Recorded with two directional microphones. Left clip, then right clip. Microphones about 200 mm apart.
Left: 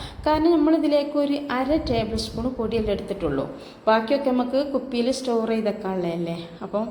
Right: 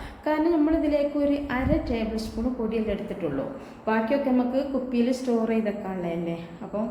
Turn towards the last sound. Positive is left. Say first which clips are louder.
# left 4 dB
turn(degrees=20)  # may be behind; listen again after turning